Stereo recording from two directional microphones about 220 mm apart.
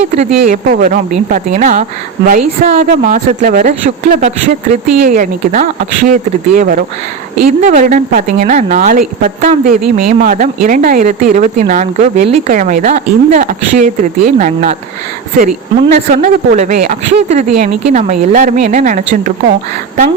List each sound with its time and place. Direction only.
0.2 s a woman's voice: 30° right (ahead or behind)
16.1 s a woman's voice: 40° right (ahead or behind)